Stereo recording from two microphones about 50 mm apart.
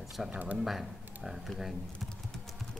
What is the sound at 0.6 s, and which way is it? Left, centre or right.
Speech, centre.